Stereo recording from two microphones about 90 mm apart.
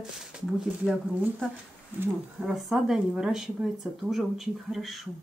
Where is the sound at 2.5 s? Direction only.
5° right (ahead or behind).